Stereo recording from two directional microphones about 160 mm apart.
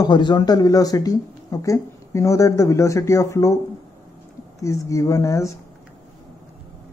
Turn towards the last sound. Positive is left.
turn(degrees=20)  # may be behind; listen again after turning